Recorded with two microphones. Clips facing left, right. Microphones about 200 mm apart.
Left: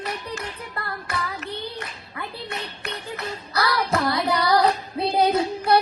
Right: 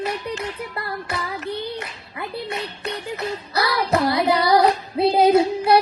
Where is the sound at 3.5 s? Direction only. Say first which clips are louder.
Right 2 dB; 25° right (ahead or behind).